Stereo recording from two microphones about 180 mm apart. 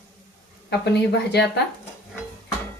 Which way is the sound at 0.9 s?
70° left (ahead or behind).